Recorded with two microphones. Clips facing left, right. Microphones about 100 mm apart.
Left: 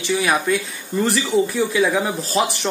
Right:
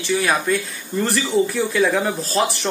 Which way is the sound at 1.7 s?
5° left (ahead or behind).